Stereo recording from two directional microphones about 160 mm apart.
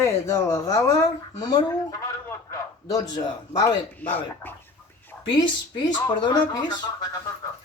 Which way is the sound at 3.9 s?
10° left (ahead or behind).